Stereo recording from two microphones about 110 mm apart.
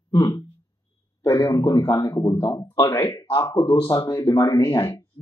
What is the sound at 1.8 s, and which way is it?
Speech, 20° left (ahead or behind).